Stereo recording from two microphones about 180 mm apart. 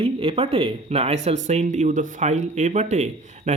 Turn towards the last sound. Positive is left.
turn(degrees=-40)  # may be behind; listen again after turning